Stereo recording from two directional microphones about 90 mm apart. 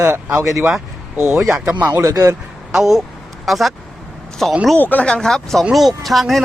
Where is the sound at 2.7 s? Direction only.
5° right (ahead or behind).